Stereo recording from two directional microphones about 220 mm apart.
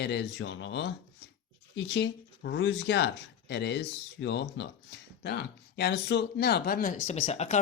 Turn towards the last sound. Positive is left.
turn(degrees=30)  # may be behind; listen again after turning